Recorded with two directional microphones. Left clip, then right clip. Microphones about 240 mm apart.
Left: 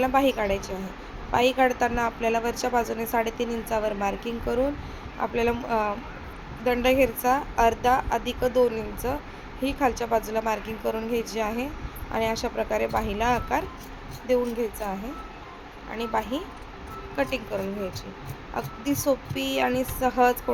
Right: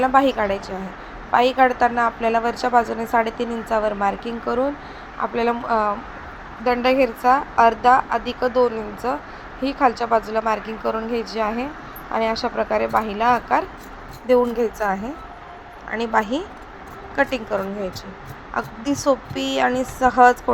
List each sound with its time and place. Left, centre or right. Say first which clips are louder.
0.0 s a woman's voice: right 6 dB; centre
14.3 s speech: right 7 dB; centre